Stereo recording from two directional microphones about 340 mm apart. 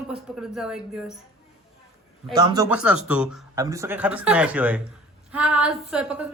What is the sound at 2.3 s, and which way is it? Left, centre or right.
Speech, centre.